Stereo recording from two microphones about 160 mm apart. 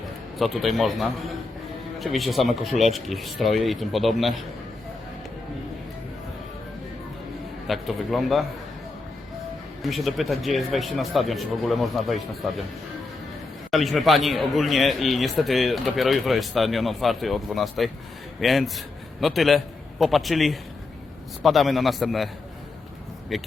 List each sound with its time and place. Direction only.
0.3 s a man's voice: centre (ahead or behind)
7.7 s a man's voice: centre (ahead or behind)
9.8 s a man's voice: centre (ahead or behind)
13.7 s a man's voice: centre (ahead or behind)
23.3 s a man's voice: centre (ahead or behind)